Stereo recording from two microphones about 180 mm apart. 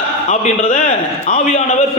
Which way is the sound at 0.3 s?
40° left (ahead or behind).